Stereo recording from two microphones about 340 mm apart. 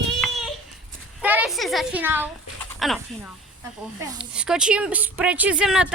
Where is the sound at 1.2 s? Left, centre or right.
Centre.